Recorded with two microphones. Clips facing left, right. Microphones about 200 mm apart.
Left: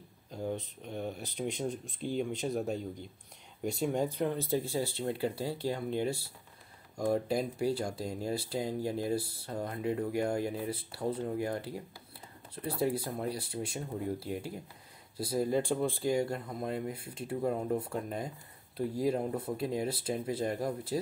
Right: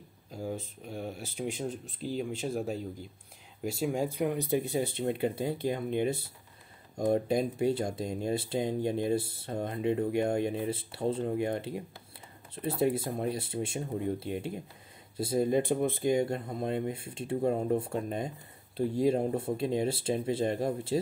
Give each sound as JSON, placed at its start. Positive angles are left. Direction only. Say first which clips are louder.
{"t": 0.3, "sound": "speech", "louder": "even", "side_deg": -5}